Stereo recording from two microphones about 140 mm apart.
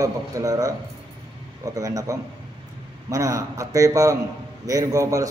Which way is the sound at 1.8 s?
25° right (ahead or behind).